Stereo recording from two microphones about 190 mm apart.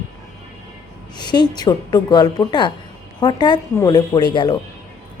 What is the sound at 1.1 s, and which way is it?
Speech, 25° left (ahead or behind).